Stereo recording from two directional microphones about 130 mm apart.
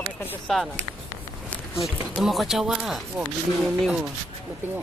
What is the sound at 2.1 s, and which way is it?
Speech, centre (ahead or behind).